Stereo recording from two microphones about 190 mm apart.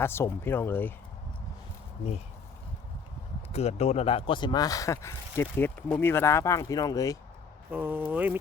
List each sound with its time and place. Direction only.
0.0 s speech: 15° left (ahead or behind)
3.5 s speech: 35° left (ahead or behind); by 7.2 s 20° left (ahead or behind)
7.7 s speech: 10° right (ahead or behind)